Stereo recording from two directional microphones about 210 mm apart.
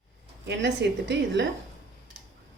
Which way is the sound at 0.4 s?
55° right (ahead or behind).